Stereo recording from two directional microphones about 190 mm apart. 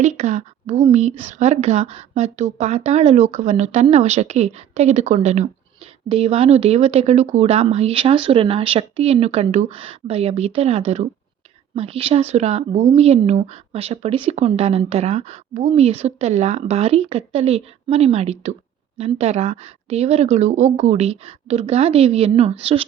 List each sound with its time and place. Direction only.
0.0 s speech: 35° right (ahead or behind)